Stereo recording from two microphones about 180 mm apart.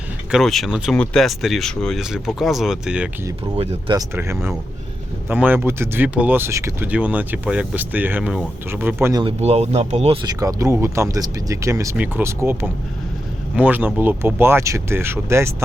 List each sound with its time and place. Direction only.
0.3 s speech: centre (ahead or behind)
3.6 s speech: 35° right (ahead or behind)
3.9 s speech: 15° right (ahead or behind)
9.2 s speech: 35° right (ahead or behind)
10.2 s speech: 20° right (ahead or behind)